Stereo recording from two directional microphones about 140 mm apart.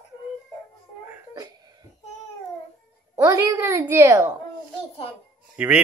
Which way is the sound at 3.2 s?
25° right (ahead or behind).